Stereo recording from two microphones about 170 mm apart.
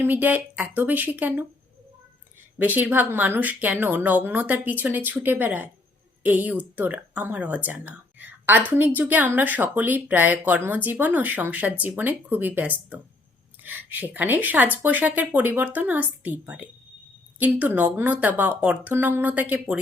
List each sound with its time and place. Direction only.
0.0 s speech: 10° right (ahead or behind)
2.6 s speech: 10° right (ahead or behind)